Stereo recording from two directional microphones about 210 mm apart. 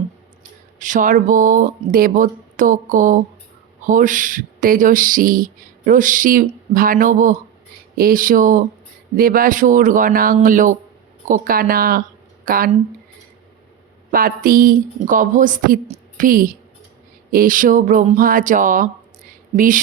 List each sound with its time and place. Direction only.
0.8 s speech: 40° right (ahead or behind)
14.1 s speech: 45° right (ahead or behind)